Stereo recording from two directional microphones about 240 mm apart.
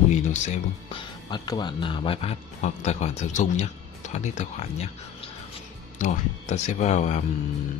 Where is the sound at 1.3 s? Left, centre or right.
Centre.